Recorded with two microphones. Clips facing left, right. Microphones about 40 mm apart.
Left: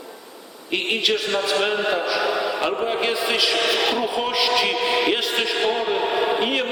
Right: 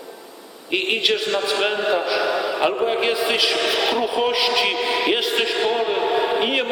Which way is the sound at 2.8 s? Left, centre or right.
Centre.